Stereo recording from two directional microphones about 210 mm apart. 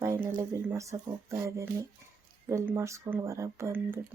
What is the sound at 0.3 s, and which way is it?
Speech, 15° right (ahead or behind).